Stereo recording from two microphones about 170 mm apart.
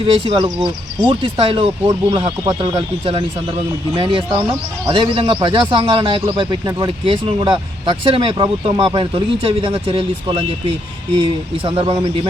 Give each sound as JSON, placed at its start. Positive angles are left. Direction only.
{"t": 0.0, "sound": "speech", "side_deg": -35}